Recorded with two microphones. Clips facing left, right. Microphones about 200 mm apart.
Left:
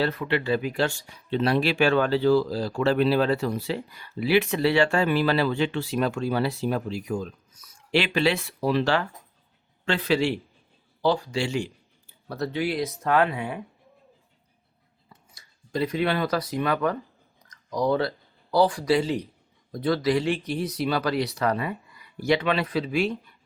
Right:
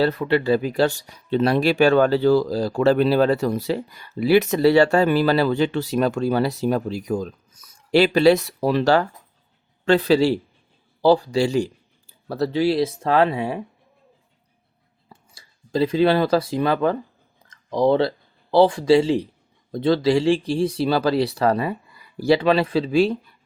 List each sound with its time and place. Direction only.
0.0 s speech: 35° right (ahead or behind)
15.1 s speech: 30° right (ahead or behind)
17.5 s a sound: 25° right (ahead or behind)
18.5 s speech: 25° right (ahead or behind)